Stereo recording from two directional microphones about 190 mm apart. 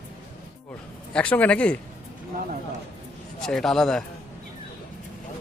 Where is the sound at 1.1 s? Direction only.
5° left (ahead or behind).